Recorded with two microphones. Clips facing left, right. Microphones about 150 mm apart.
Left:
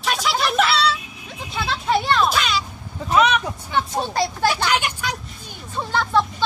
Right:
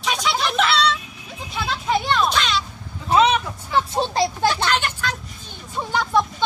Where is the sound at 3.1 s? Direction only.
30° right (ahead or behind).